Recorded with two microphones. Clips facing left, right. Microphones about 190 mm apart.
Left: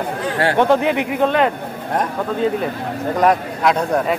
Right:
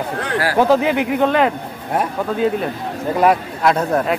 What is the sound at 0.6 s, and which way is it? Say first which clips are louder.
Speech: right 2 dB; centre (ahead or behind).